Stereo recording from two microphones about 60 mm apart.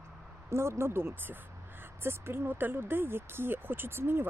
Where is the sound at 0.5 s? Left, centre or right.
Right.